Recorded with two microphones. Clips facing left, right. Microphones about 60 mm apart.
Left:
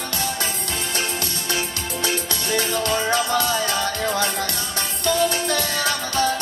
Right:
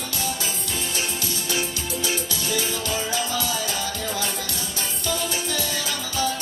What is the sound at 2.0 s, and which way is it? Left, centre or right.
Music, left.